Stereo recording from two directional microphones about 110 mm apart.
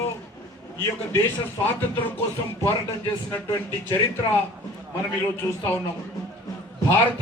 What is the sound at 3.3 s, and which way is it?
Speech, 20° left (ahead or behind).